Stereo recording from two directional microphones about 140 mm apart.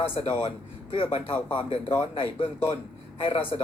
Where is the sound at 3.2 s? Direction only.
40° left (ahead or behind).